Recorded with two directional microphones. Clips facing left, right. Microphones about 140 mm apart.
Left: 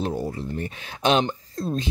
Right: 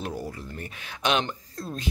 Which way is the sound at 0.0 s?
25° left (ahead or behind).